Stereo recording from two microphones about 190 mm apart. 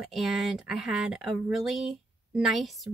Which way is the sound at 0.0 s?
Centre (ahead or behind).